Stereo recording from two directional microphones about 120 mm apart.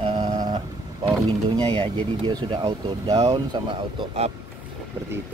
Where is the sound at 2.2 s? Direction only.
35° right (ahead or behind).